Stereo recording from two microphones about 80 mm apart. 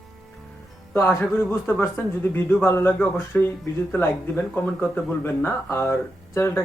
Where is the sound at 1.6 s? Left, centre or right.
Left.